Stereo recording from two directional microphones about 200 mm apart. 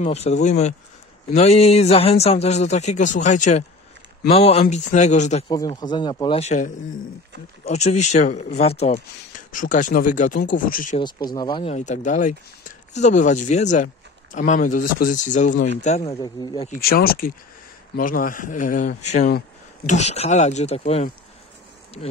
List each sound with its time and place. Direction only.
0.0 s a man's voice: 35° left (ahead or behind)
5.5 s a man's voice: 20° left (ahead or behind); by 11.0 s 45° left (ahead or behind)
11.0 s speech: 20° left (ahead or behind)
11.7 s a man's voice: 35° left (ahead or behind)
16.1 s speech: 20° left (ahead or behind)
16.8 s a man's voice: 50° left (ahead or behind); by 21.1 s 30° left (ahead or behind)